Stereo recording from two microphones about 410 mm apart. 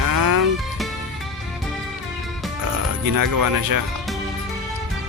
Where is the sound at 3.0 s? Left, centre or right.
Right.